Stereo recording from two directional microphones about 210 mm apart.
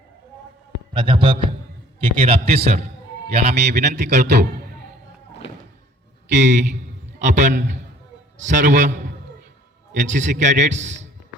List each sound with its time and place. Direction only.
0.9 s a man's voice: 25° right (ahead or behind)
3.5 s a man's voice: 50° right (ahead or behind)
6.3 s a man's voice: 35° right (ahead or behind)